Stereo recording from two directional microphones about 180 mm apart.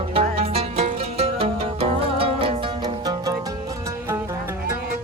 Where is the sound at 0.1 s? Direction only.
30° right (ahead or behind).